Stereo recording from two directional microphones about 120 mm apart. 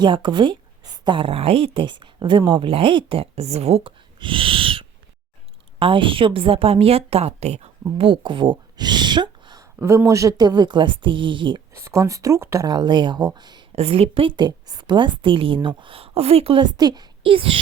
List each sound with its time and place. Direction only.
0.0 s a woman's voice: 40° right (ahead or behind)
9.8 s a woman's voice: 25° right (ahead or behind); by 11.6 s 45° right (ahead or behind)
11.7 s speech: 25° right (ahead or behind)
12.6 s a woman's voice: 35° right (ahead or behind)
13.7 s a woman's voice: 60° right (ahead or behind)
16.7 s a child's voice: 35° right (ahead or behind)